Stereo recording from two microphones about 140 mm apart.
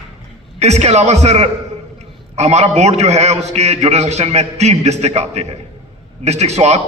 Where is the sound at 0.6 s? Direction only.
50° right (ahead or behind).